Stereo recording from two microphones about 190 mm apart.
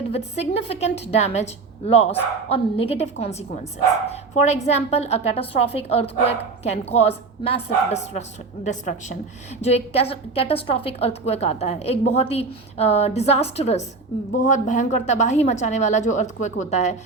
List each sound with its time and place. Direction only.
0.1 s a woman's voice: 35° left (ahead or behind)